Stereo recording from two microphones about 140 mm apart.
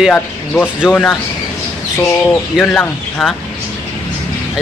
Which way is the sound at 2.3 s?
5° left (ahead or behind).